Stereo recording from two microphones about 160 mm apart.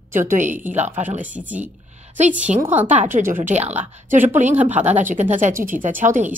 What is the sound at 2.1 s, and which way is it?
Speech, 50° right (ahead or behind).